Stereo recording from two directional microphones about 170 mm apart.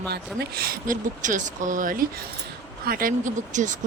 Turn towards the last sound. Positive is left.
turn(degrees=-50)  # may be behind; listen again after turning